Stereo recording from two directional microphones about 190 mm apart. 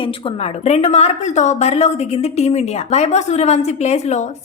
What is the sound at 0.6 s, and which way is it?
A woman's voice, 35° left (ahead or behind).